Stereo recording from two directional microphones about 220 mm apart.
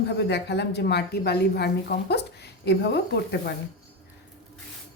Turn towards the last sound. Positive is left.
turn(degrees=50)  # may be behind; listen again after turning